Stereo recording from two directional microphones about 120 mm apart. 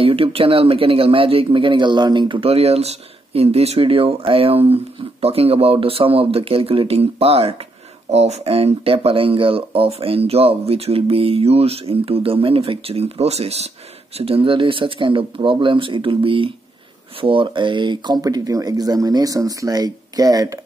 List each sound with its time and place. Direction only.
0.0 s speech: 50° right (ahead or behind); by 20.6 s 30° right (ahead or behind)